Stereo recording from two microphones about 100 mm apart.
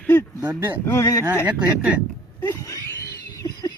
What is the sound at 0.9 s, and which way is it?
Speech, 30° left (ahead or behind).